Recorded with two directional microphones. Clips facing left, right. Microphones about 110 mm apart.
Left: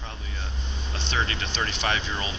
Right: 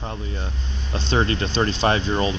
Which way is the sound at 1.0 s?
35° right (ahead or behind).